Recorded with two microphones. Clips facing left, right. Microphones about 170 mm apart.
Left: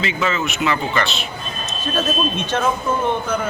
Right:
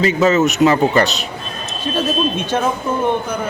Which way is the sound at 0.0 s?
40° right (ahead or behind).